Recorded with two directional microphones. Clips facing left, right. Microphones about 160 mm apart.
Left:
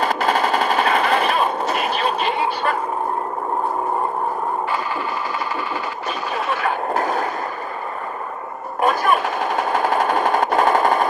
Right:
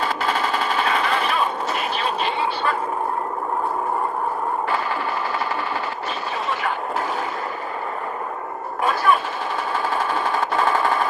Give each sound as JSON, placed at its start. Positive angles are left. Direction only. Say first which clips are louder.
{"t": 0.0, "sound": "machine gun", "louder": "left 4 dB", "side_deg": 45}
{"t": 6.6, "sound": "vehicle", "louder": "left 4 dB", "side_deg": 40}
{"t": 8.8, "sound": "machine gun", "louder": "left 2 dB", "side_deg": 45}